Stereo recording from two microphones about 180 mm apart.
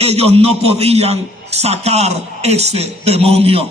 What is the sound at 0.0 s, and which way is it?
A man's voice, 35° right (ahead or behind).